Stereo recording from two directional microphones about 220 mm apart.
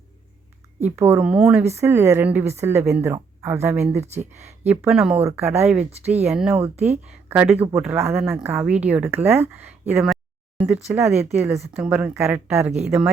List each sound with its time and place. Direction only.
0.8 s a woman's voice: 10° right (ahead or behind)
3.9 s speech: 30° right (ahead or behind)
4.3 s a woman's voice: 10° right (ahead or behind)
6.7 s speech: 30° right (ahead or behind)
7.0 s a woman's voice: 5° right (ahead or behind)
11.2 s a woman's voice: 10° right (ahead or behind)